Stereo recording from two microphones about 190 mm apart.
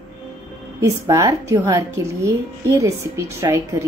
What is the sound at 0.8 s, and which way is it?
A child's voice, 15° right (ahead or behind).